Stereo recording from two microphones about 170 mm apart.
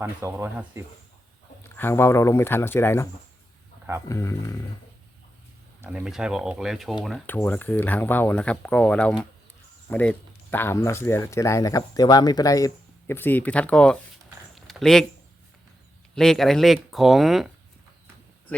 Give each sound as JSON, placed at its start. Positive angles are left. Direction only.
{"t": 0.0, "sound": "speech", "side_deg": -15}
{"t": 1.7, "sound": "speech", "side_deg": 15}
{"t": 4.1, "sound": "speech", "side_deg": 15}
{"t": 5.8, "sound": "speech", "side_deg": -5}
{"t": 7.3, "sound": "speech", "side_deg": 10}
{"t": 14.5, "sound": "a sound", "side_deg": 0}
{"t": 16.1, "sound": "speech", "side_deg": 0}